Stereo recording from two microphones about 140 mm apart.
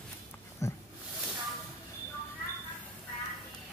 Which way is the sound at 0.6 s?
20° left (ahead or behind).